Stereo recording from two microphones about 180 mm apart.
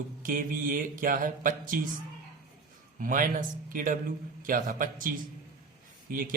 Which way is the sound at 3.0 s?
50° right (ahead or behind).